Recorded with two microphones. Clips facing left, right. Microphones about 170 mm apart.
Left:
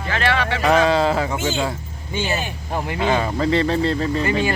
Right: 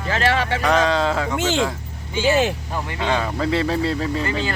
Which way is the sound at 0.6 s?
5° left (ahead or behind).